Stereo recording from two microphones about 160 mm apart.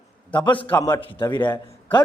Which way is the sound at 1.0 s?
30° left (ahead or behind).